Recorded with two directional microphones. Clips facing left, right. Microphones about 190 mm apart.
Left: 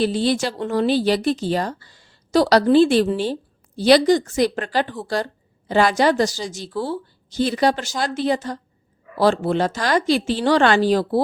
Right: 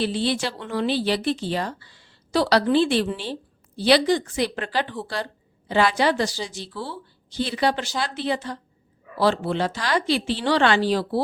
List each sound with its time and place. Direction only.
0.0 s a woman's voice: 40° left (ahead or behind)